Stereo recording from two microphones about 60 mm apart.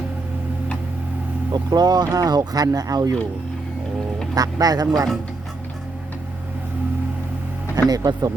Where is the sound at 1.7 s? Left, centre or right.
Right.